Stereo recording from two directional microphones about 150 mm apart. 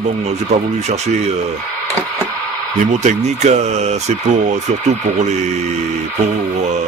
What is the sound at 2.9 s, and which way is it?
Speech, 50° right (ahead or behind).